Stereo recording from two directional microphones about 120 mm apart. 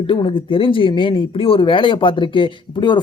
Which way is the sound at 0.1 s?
45° left (ahead or behind).